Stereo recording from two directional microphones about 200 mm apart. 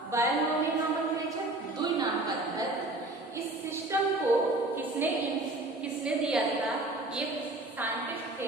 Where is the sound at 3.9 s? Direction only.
15° right (ahead or behind).